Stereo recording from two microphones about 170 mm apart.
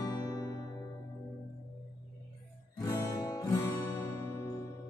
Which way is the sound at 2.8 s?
20° left (ahead or behind).